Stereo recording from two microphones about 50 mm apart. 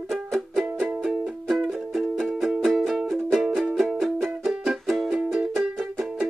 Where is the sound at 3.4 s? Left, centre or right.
Centre.